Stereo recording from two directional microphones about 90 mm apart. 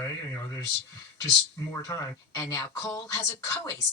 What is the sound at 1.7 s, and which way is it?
Speech, 35° left (ahead or behind).